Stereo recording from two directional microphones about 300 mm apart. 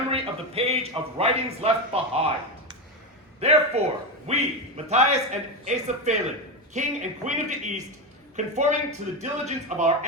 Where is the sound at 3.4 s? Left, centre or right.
Right.